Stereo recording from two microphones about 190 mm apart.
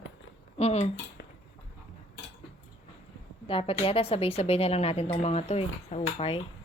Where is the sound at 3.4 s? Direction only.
30° left (ahead or behind).